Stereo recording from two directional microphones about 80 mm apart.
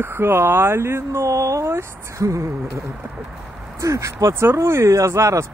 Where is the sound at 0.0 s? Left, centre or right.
Right.